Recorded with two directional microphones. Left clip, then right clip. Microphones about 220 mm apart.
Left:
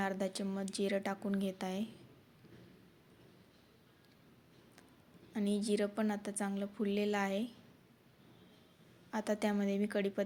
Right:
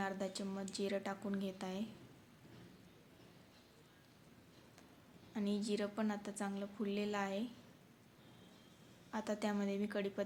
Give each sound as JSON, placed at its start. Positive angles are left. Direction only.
{"t": 0.0, "sound": "a woman's voice", "side_deg": 25}
{"t": 5.3, "sound": "a woman's voice", "side_deg": 25}
{"t": 9.0, "sound": "a woman's voice", "side_deg": 25}